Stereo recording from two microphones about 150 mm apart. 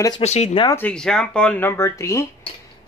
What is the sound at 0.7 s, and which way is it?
Speech, 10° left (ahead or behind).